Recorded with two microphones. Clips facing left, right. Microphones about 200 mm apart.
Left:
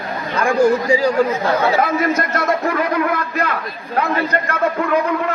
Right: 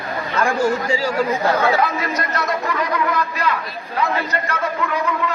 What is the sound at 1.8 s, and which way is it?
A man's voice, 50° left (ahead or behind).